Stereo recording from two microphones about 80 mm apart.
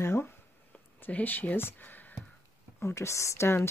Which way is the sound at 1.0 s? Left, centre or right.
Left.